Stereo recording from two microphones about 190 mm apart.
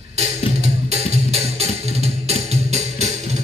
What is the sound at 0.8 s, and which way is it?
Music, 35° right (ahead or behind).